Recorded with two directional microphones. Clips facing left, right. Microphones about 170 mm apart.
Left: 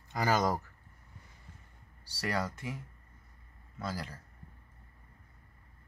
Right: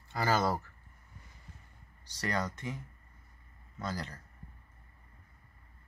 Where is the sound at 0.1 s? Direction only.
15° left (ahead or behind).